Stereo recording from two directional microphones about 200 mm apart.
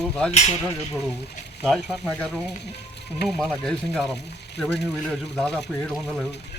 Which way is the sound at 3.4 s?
Centre (ahead or behind).